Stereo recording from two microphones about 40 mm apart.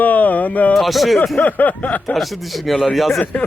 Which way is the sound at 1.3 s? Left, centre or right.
Left.